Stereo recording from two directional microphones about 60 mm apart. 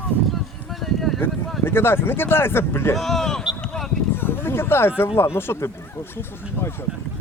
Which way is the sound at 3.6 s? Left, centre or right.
Centre.